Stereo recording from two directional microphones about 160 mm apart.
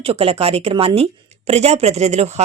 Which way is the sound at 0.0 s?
35° right (ahead or behind).